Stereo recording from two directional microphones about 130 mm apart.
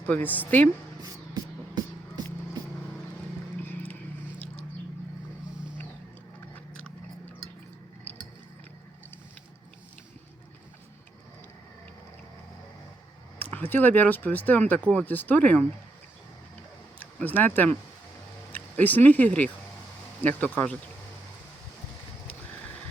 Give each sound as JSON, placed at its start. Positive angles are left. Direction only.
{"t": 0.0, "sound": "speech", "side_deg": 15}
{"t": 1.0, "sound": "music", "side_deg": -30}
{"t": 13.4, "sound": "speech", "side_deg": 15}
{"t": 17.0, "sound": "speech", "side_deg": 10}